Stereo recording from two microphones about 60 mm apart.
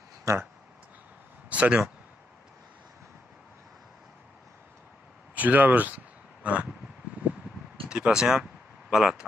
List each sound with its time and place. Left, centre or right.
0.3 s speech: right
1.5 s speech: centre
5.3 s speech: right
6.4 s a sound: right
7.9 s speech: centre